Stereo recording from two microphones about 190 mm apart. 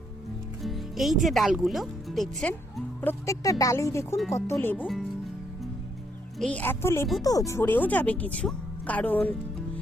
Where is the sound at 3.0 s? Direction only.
15° left (ahead or behind).